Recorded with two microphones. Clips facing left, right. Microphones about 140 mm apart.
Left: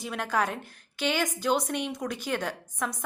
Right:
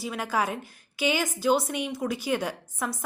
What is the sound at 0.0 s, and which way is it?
A woman's voice, 5° right (ahead or behind).